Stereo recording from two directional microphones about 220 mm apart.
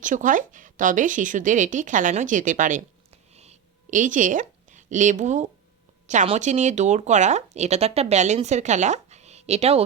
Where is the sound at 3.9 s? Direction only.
35° right (ahead or behind).